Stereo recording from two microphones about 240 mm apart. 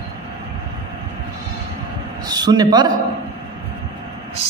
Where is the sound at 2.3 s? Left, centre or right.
Centre.